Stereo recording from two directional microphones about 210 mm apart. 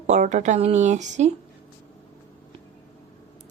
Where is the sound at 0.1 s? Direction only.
35° right (ahead or behind).